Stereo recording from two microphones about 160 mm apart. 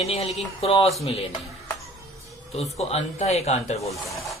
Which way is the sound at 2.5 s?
40° left (ahead or behind).